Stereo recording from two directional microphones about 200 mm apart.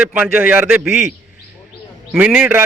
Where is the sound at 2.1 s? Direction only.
5° right (ahead or behind).